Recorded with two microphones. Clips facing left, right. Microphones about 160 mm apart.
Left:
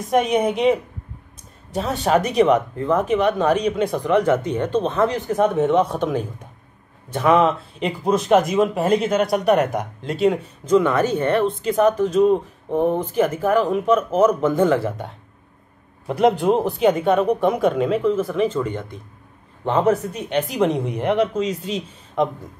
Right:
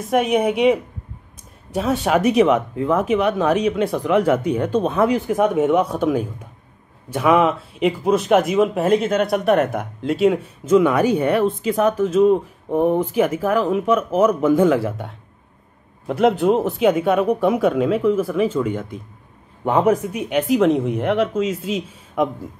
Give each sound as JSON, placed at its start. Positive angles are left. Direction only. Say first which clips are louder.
{"t": 0.1, "sound": "speech", "louder": "right 1 dB", "side_deg": -5}
{"t": 16.1, "sound": "speech", "louder": "right 1 dB", "side_deg": 0}